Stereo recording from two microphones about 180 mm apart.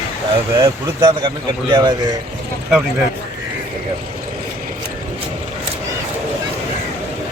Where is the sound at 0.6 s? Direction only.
30° right (ahead or behind).